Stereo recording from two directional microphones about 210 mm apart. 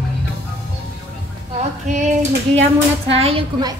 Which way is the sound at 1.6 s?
35° right (ahead or behind).